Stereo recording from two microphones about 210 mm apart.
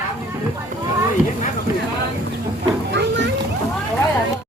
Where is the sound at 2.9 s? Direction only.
60° right (ahead or behind).